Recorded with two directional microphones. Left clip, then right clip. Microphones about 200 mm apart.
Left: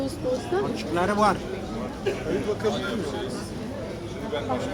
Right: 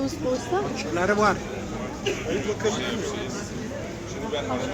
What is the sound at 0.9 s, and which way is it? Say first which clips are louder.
Speech: right 1 dB; 60° left (ahead or behind).